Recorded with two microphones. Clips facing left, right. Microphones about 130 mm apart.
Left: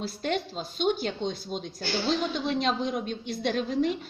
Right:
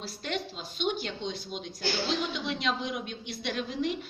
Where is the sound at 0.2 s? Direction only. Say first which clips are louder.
Left 4 dB; 45° left (ahead or behind).